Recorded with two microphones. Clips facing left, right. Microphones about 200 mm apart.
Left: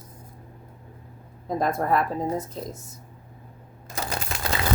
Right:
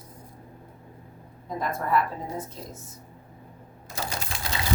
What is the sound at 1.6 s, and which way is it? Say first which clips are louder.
Speech: left 2 dB; 40° left (ahead or behind).